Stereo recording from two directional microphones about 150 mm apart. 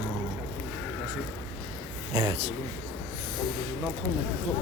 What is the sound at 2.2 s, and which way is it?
Speech, 40° right (ahead or behind).